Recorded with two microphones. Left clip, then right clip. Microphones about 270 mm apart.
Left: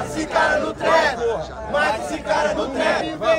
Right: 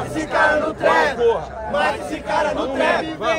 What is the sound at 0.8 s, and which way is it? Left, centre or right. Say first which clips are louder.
Music: even; centre.